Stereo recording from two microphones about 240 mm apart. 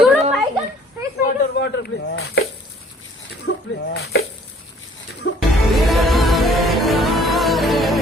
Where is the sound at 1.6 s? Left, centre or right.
Left.